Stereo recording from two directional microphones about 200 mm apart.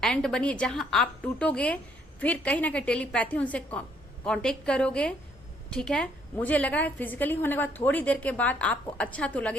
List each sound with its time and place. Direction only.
0.0 s a woman's voice: 5° left (ahead or behind)